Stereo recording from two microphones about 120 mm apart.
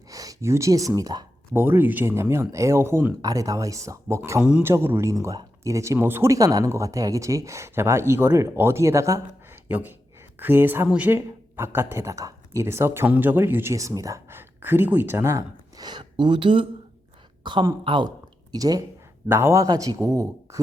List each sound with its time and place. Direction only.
0.1 s speech: 30° right (ahead or behind)
1.5 s speech: 20° right (ahead or behind)
4.4 s speech: 10° right (ahead or behind)
4.6 s speech: 20° right (ahead or behind)
9.6 s speech: 15° right (ahead or behind)
15.9 s a woman's voice: 40° right (ahead or behind)
19.3 s speech: 20° right (ahead or behind)